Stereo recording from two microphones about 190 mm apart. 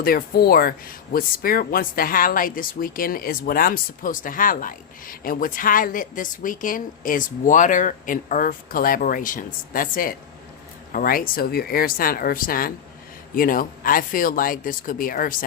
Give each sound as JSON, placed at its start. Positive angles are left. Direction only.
{"t": 0.0, "sound": "speech", "side_deg": 50}